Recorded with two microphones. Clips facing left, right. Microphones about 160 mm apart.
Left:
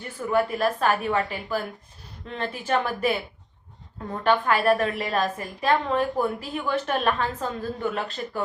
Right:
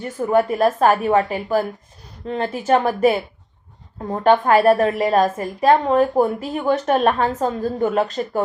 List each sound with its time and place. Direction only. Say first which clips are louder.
0.2 s a woman's voice: right 6 dB; 45° right (ahead or behind)